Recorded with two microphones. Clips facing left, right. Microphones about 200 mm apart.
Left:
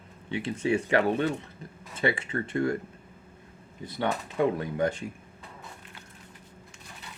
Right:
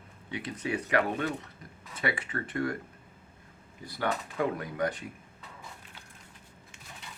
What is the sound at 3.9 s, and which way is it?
Speech, 25° left (ahead or behind).